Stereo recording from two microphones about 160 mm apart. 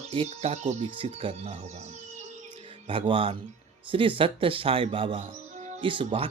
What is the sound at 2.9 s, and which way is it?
Speech, 35° right (ahead or behind).